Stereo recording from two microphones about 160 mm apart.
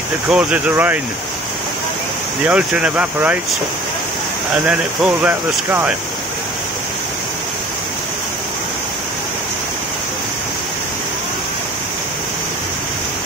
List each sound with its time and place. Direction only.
0.3 s speech: 5° right (ahead or behind)
2.4 s speech: 10° right (ahead or behind)
4.6 s speech: 10° right (ahead or behind)